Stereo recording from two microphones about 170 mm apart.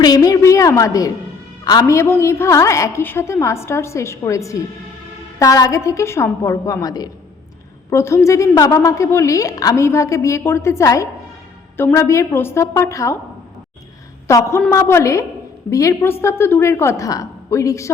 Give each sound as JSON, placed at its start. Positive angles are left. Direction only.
{"t": 0.0, "sound": "a sound", "side_deg": 20}
{"t": 1.6, "sound": "a woman's voice", "side_deg": 20}
{"t": 14.3, "sound": "a woman's voice", "side_deg": 15}